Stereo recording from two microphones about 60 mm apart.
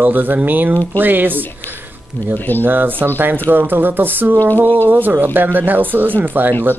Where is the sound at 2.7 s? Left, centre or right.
Right.